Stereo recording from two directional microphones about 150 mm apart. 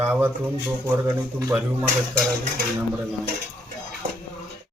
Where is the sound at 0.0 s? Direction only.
15° right (ahead or behind).